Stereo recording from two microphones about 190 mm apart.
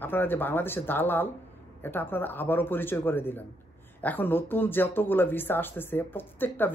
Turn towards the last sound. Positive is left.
turn(degrees=10)  # may be behind; listen again after turning